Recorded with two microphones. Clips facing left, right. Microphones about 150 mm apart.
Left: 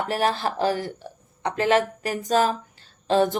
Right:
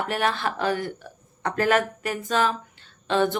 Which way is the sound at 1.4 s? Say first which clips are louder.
Left 1 dB; 20° left (ahead or behind).